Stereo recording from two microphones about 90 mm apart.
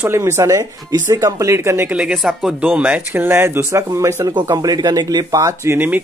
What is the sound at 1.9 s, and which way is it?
Speech, 15° right (ahead or behind).